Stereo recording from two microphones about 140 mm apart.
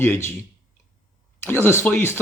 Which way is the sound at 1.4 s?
15° left (ahead or behind).